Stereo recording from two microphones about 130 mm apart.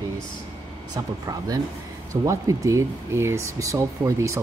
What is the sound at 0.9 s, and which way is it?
Speech, 30° right (ahead or behind).